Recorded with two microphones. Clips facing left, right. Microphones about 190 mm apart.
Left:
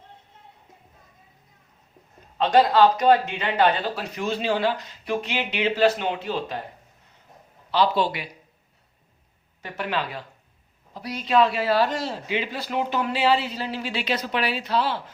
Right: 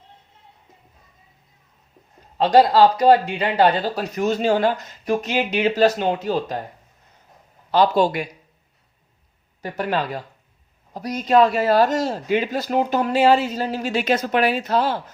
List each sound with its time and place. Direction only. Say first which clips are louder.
2.4 s a man's voice: right 3 dB; 35° right (ahead or behind)
7.7 s a man's voice: right 5 dB; 45° right (ahead or behind)
9.6 s a man's voice: right 5 dB; 40° right (ahead or behind)